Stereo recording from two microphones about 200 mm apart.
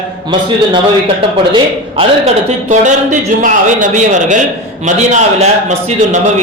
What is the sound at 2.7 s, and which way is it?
Speech, 35° right (ahead or behind).